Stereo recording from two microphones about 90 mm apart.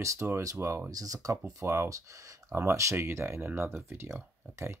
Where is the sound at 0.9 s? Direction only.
40° right (ahead or behind).